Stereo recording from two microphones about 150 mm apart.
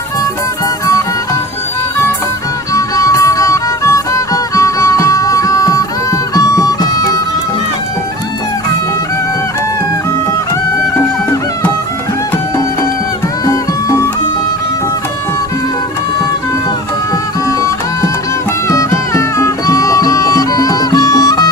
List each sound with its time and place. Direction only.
2.7 s music: 20° left (ahead or behind)
13.4 s music: 20° left (ahead or behind)
18.7 s music: 20° left (ahead or behind)